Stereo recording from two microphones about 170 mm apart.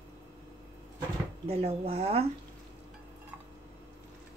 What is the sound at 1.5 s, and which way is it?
Speech, 35° right (ahead or behind).